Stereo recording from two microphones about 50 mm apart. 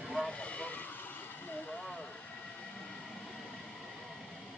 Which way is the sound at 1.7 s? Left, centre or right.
Left.